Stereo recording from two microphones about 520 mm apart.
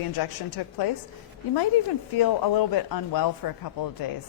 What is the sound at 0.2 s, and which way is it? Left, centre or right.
Speech, left.